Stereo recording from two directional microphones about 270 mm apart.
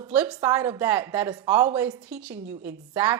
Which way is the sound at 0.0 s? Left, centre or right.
Centre.